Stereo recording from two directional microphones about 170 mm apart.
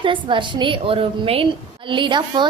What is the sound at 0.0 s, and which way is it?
A woman's voice, 30° right (ahead or behind).